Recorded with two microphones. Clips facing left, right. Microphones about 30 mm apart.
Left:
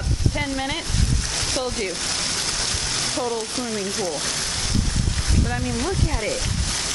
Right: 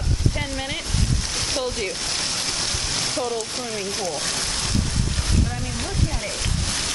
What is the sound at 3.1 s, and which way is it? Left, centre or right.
Speech, centre.